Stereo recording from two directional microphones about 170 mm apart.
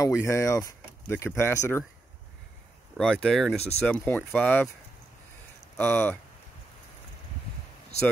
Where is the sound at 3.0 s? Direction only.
5° left (ahead or behind).